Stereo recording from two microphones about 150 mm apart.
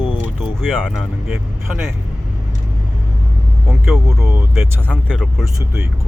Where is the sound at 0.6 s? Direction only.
Centre (ahead or behind).